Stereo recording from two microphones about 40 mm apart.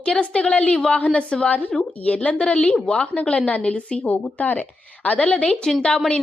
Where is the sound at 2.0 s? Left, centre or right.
Left.